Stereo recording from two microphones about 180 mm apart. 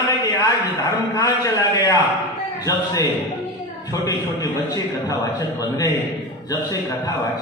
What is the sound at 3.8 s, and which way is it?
A man's voice, 20° left (ahead or behind).